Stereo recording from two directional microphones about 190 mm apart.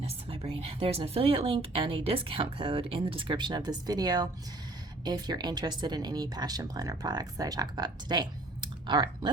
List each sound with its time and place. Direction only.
0.0 s speech: 30° right (ahead or behind)